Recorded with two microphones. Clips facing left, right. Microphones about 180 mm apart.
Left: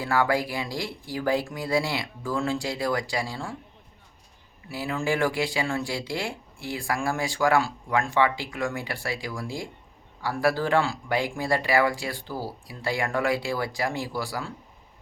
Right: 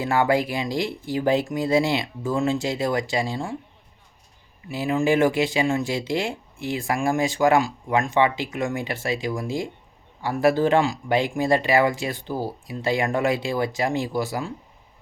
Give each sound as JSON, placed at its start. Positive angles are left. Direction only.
{"t": 0.0, "sound": "speech", "side_deg": -20}
{"t": 4.7, "sound": "speech", "side_deg": -20}